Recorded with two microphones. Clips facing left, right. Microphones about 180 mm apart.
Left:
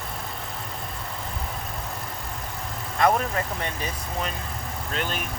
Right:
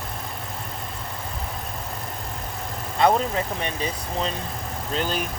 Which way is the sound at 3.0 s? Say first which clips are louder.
Right 2 dB; 25° right (ahead or behind).